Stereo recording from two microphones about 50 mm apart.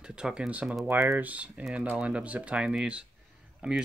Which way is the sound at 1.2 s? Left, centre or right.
Right.